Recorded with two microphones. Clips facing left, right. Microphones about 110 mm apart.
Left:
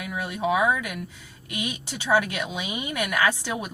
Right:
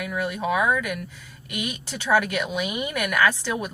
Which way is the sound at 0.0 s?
15° left (ahead or behind).